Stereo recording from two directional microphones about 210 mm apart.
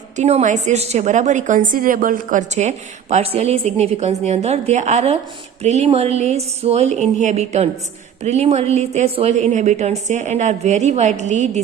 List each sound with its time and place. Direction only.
0.2 s a woman's voice: 30° right (ahead or behind)